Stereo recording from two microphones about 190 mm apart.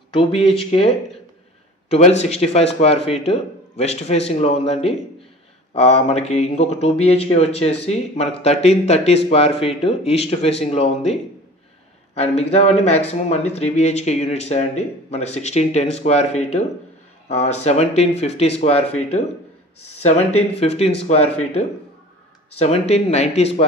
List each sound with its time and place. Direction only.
0.1 s speech: 30° left (ahead or behind)
12.2 s speech: 30° left (ahead or behind)
20.3 s speech: 35° left (ahead or behind)
22.6 s speech: 35° left (ahead or behind)